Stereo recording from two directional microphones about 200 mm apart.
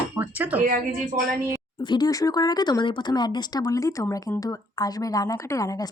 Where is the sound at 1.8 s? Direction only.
20° left (ahead or behind).